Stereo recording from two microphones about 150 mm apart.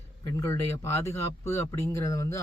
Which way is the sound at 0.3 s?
20° left (ahead or behind).